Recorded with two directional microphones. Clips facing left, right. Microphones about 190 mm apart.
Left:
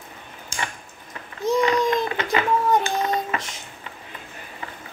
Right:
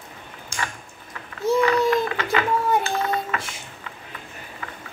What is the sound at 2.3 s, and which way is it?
Dishes, 20° left (ahead or behind).